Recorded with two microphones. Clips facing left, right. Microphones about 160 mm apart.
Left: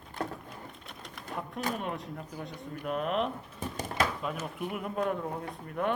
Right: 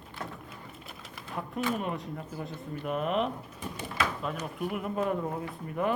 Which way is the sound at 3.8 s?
40° left (ahead or behind).